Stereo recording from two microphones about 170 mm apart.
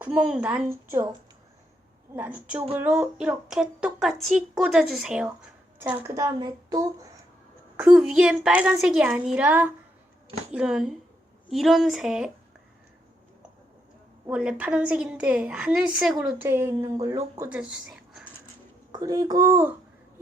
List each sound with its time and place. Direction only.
0.0 s a woman's voice: 5° right (ahead or behind)
2.1 s a woman's voice: 10° right (ahead or behind)
7.8 s a woman's voice: 5° right (ahead or behind)
14.3 s a woman's voice: 5° right (ahead or behind)
16.4 s speech: 15° right (ahead or behind)
18.9 s a child's voice: 20° right (ahead or behind)